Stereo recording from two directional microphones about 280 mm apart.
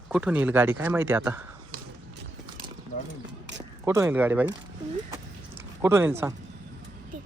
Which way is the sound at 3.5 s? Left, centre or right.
Centre.